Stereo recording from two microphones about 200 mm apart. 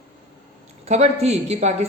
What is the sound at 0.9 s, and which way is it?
Speech, 35° right (ahead or behind).